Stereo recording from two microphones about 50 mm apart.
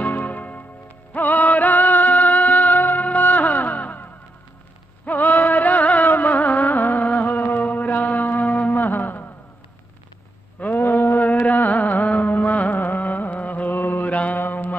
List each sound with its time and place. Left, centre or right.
0.0 s music: left
10.6 s a sound: left
11.4 s music: left